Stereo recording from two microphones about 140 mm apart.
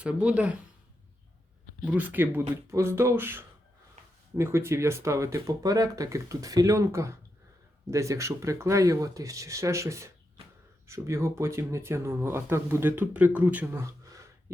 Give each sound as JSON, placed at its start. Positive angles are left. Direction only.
{"t": 0.0, "sound": "speech", "side_deg": -10}
{"t": 1.8, "sound": "speech", "side_deg": -10}